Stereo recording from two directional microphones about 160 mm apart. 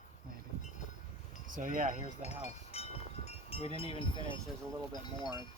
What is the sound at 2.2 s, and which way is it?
Speech, 40° left (ahead or behind).